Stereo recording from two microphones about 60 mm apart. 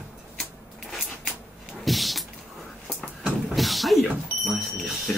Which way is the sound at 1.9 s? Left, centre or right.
Centre.